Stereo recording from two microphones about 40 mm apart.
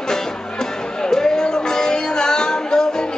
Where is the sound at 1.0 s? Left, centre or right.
Centre.